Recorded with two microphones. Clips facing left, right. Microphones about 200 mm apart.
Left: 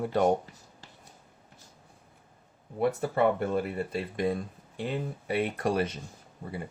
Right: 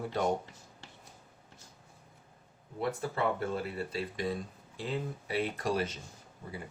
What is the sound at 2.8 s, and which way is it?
Speech, 55° left (ahead or behind).